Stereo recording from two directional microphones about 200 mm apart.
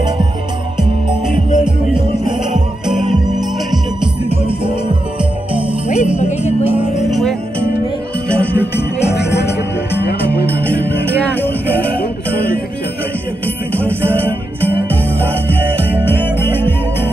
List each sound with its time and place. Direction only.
2.9 s music: centre (ahead or behind)
5.9 s music: 35° left (ahead or behind)
7.1 s music: centre (ahead or behind)
8.7 s music: 55° left (ahead or behind)
11.1 s music: 10° left (ahead or behind)
13.7 s music: 10° left (ahead or behind)
16.1 s music: 10° left (ahead or behind)